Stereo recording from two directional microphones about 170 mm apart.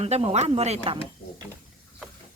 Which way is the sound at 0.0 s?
40° right (ahead or behind).